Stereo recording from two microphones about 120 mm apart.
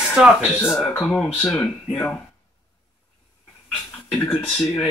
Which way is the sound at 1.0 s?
5° left (ahead or behind).